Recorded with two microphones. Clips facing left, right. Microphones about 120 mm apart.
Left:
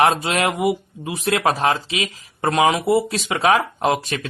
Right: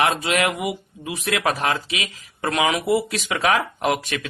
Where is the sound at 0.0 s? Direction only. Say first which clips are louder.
Left 3 dB; 30° left (ahead or behind).